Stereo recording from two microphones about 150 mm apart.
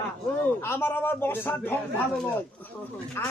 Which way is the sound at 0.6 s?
15° left (ahead or behind).